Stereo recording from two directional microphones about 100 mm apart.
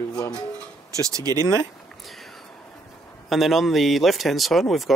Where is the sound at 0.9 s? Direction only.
35° right (ahead or behind).